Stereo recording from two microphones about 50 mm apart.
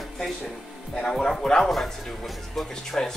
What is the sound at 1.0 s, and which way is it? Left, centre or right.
Speech, centre.